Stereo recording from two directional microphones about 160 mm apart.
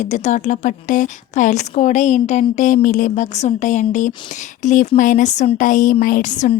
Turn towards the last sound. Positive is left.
turn(degrees=50)  # may be behind; listen again after turning